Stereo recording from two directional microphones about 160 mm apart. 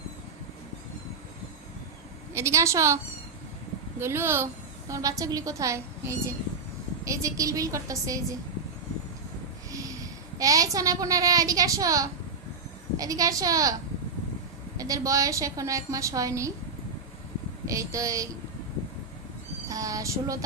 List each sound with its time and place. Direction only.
2.3 s a woman's voice: 15° right (ahead or behind)
10.3 s a woman's voice: 20° right (ahead or behind)
14.8 s a woman's voice: 20° right (ahead or behind)
17.7 s a woman's voice: 20° right (ahead or behind)
19.6 s a sound: 20° right (ahead or behind)